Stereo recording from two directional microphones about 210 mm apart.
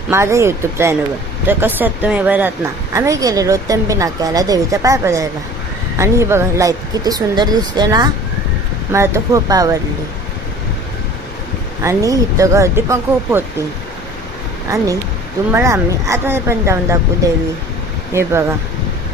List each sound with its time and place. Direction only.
0.1 s a woman's voice: 15° right (ahead or behind)
11.8 s a woman's voice: 15° right (ahead or behind)
15.5 s a woman's voice: 15° right (ahead or behind)